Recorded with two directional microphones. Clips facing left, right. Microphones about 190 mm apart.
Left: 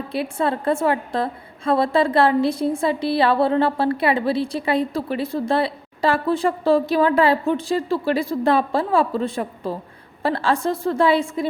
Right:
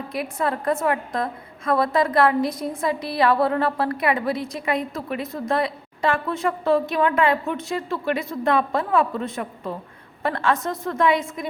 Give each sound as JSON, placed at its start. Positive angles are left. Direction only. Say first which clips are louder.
{"t": 0.1, "sound": "a woman's voice", "louder": "left 3 dB", "side_deg": 30}